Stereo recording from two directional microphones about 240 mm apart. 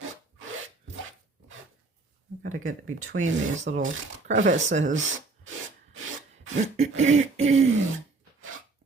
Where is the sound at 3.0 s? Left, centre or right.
Right.